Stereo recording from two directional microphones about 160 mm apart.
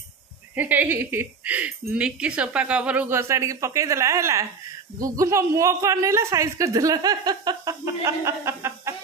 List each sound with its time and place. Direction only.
0.6 s speech: 10° right (ahead or behind)